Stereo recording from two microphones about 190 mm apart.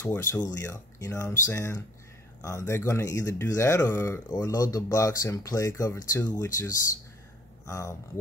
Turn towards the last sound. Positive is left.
turn(degrees=15)  # may be behind; listen again after turning